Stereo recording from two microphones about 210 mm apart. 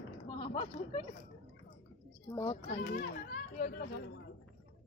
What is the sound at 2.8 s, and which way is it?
A child's voice, 45° left (ahead or behind).